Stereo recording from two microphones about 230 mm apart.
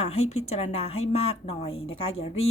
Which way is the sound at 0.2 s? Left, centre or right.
Left.